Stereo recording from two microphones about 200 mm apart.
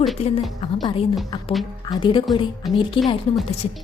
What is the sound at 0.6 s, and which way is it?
Speech, 30° left (ahead or behind).